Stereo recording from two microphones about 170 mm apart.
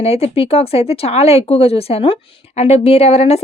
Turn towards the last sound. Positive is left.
turn(degrees=35)  # may be behind; listen again after turning